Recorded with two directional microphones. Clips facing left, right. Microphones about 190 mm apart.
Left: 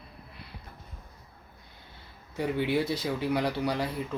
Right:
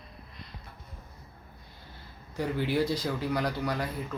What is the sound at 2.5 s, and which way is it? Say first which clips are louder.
Speech: left 2 dB; 65° left (ahead or behind).